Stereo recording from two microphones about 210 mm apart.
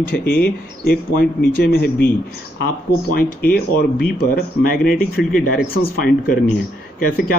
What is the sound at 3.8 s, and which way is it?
A man's voice, 50° left (ahead or behind).